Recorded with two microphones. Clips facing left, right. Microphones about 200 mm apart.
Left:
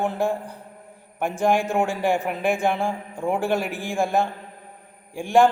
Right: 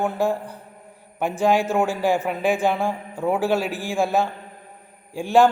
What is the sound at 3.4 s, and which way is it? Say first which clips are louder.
Speech: right 2 dB; 55° left (ahead or behind).